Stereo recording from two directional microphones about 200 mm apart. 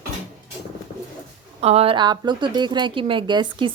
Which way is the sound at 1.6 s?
30° right (ahead or behind).